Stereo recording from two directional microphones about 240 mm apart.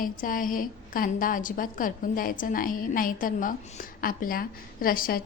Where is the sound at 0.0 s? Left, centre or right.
Left.